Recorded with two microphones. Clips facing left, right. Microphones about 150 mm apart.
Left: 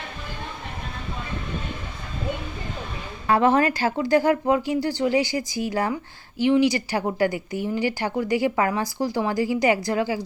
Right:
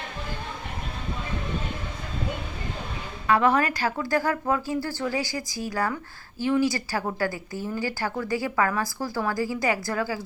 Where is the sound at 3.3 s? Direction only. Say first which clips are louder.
Left 3 dB; 30° left (ahead or behind).